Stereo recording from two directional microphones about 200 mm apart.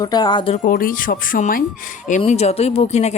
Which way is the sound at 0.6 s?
45° left (ahead or behind).